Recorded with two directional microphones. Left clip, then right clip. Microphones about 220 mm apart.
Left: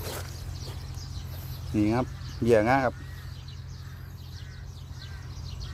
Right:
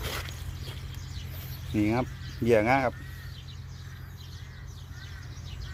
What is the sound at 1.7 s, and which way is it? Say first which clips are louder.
Speech: left 1 dB; centre (ahead or behind).